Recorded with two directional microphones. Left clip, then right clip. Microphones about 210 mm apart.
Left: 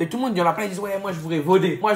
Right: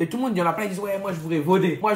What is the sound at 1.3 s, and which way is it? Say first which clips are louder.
Speech: left 2 dB; centre (ahead or behind).